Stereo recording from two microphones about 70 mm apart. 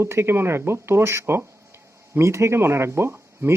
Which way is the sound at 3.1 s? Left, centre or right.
Right.